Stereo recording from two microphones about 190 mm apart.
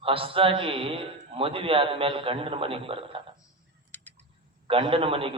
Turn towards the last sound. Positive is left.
turn(degrees=-30)  # may be behind; listen again after turning